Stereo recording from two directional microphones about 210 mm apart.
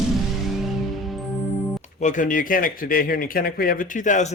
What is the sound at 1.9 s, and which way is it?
Speech, 35° left (ahead or behind).